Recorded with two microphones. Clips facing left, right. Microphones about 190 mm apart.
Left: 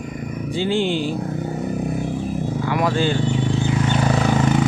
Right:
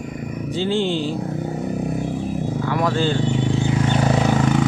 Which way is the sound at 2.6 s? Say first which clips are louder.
Left 1 dB; 15° left (ahead or behind).